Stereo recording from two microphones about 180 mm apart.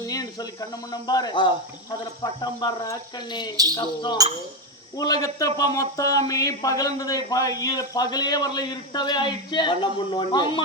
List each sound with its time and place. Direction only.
0.0 s speech: 20° left (ahead or behind)